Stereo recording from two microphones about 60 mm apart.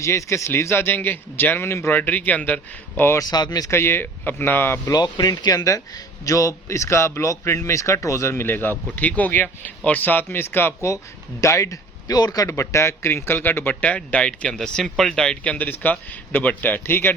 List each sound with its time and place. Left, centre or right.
0.0 s speech: left
1.9 s speech: left
3.2 s speech: left
3.7 s a man's voice: left
5.2 s a man's voice: left
10.8 s speech: left; by 15.4 s centre
15.4 s a man's voice: left